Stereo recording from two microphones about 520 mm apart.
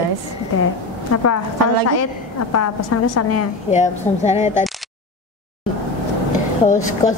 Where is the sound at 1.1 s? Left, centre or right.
Left.